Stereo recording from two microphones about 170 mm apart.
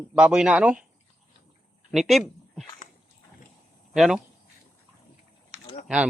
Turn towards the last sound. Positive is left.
turn(degrees=35)  # may be behind; listen again after turning